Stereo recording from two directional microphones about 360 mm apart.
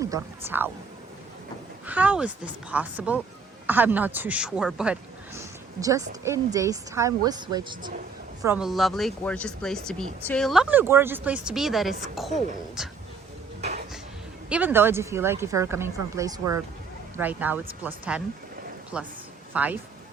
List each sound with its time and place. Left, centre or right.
0.0 s a woman's voice: centre
1.9 s a woman's voice: centre
13.6 s a sound: centre
14.5 s a woman's voice: centre